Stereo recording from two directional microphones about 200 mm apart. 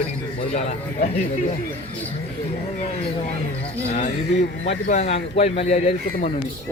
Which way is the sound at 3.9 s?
35° left (ahead or behind).